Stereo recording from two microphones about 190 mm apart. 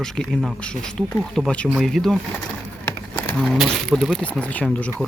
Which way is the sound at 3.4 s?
Centre (ahead or behind).